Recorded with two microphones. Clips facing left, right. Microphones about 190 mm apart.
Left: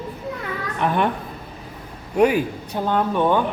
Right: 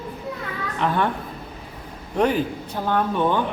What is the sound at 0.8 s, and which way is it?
Speech, 15° left (ahead or behind).